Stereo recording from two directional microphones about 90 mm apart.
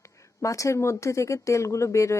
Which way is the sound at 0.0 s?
35° left (ahead or behind).